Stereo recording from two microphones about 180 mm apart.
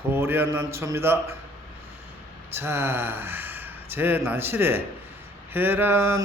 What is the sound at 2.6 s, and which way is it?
Speech, 15° right (ahead or behind).